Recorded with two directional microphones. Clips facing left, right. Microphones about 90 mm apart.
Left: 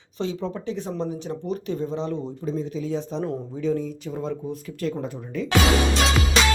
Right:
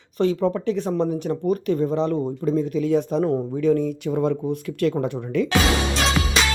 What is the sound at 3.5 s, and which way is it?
Speech, 65° right (ahead or behind).